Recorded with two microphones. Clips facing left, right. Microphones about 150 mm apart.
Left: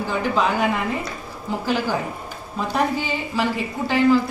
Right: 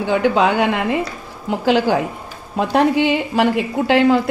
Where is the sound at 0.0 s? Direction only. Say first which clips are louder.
Right 6 dB; 75° right (ahead or behind).